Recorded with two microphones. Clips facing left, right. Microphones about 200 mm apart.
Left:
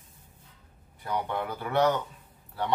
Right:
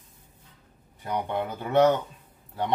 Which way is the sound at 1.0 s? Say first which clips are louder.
Right 2 dB; 20° right (ahead or behind).